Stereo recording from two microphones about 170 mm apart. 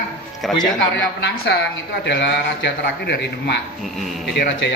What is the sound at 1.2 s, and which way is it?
Speech, 90° left.